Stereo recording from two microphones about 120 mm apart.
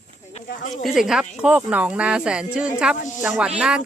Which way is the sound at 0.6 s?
90° left.